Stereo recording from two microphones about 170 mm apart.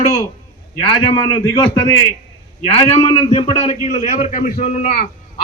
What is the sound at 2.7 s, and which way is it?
A man's voice, 35° left (ahead or behind).